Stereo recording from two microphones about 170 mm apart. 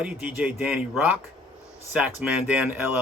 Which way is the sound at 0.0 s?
10° right (ahead or behind).